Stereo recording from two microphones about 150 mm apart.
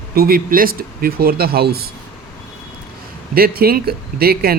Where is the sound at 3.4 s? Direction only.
90° right.